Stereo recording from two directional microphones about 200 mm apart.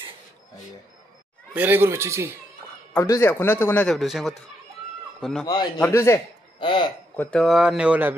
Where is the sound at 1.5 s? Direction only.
10° right (ahead or behind).